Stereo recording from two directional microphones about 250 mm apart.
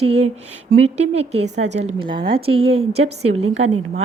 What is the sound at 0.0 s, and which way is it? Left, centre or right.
A woman's voice, right.